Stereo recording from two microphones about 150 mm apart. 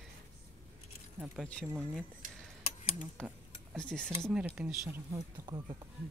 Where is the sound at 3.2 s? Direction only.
5° left (ahead or behind).